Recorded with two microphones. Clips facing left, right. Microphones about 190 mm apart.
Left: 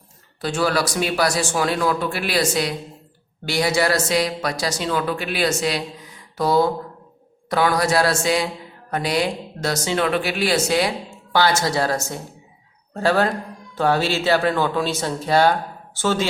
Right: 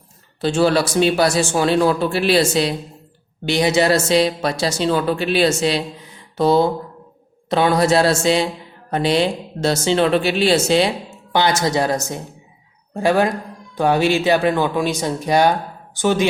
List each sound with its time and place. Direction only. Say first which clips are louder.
0.4 s speech: right 5 dB; 25° right (ahead or behind)